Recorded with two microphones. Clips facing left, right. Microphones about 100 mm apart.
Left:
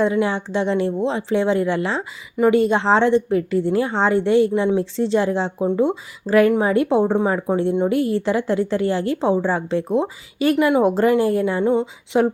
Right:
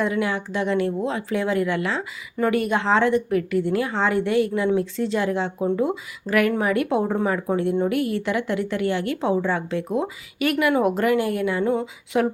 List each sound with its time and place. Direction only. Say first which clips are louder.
0.0 s a woman's voice: left 4 dB; 30° left (ahead or behind)